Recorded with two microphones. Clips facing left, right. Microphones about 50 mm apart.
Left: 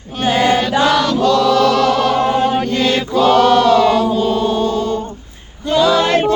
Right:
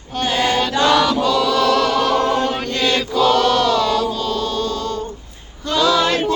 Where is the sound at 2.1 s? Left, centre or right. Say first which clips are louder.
Left 3 dB; centre.